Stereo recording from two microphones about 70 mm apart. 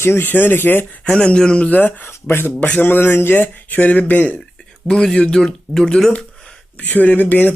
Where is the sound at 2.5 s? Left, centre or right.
Left.